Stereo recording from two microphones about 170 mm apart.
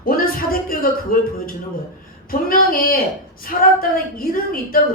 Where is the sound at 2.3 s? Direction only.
55° left (ahead or behind).